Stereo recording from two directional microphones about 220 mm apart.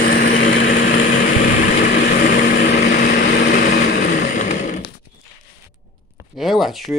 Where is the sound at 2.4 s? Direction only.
45° left (ahead or behind).